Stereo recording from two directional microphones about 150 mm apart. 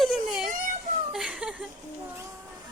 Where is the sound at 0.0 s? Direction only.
Centre (ahead or behind).